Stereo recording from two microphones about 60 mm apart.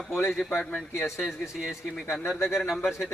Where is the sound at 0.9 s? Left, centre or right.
Left.